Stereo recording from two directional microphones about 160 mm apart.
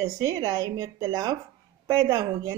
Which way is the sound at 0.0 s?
20° right (ahead or behind).